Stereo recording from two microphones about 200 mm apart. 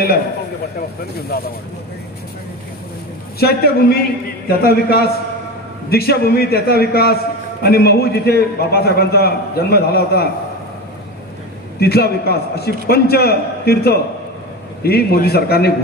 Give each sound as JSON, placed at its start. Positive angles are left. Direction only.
{"t": 3.3, "sound": "a man's voice", "side_deg": 50}
{"t": 11.8, "sound": "a man's voice", "side_deg": 50}